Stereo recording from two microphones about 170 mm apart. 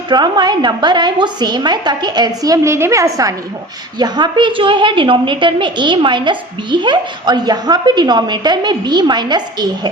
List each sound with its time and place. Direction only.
0.1 s a woman's voice: 25° right (ahead or behind)